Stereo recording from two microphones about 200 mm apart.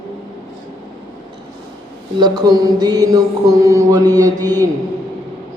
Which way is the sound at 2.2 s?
20° right (ahead or behind).